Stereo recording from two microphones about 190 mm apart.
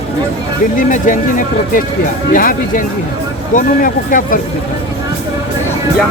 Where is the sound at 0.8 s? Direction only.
40° left (ahead or behind).